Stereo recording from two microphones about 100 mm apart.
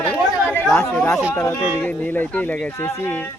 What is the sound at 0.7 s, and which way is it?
Speech, 5° left (ahead or behind).